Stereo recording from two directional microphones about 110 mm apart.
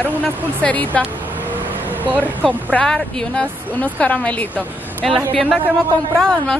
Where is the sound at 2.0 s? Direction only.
15° right (ahead or behind).